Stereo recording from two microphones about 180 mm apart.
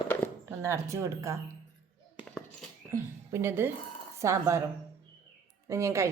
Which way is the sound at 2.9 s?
15° right (ahead or behind).